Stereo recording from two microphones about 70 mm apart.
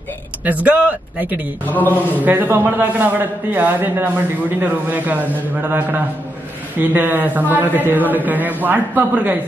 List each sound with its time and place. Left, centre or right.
0.5 s a man's voice: right
1.7 s a man's voice: left
2.2 s a man's voice: right